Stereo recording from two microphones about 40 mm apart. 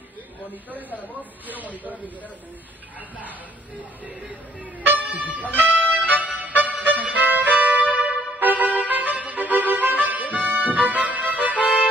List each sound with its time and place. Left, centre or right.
0.7 s music: right
0.9 s speech: left
3.3 s speech: right
4.9 s music: right